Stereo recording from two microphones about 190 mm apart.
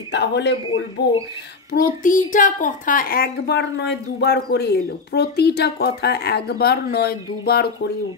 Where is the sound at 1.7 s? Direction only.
45° left (ahead or behind).